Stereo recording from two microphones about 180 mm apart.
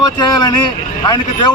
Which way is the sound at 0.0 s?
20° left (ahead or behind).